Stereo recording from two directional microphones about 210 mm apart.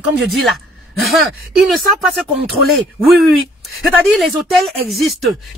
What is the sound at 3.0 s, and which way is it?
Speech, centre (ahead or behind).